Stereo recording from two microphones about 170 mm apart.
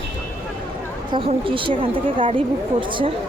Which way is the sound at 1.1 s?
30° right (ahead or behind).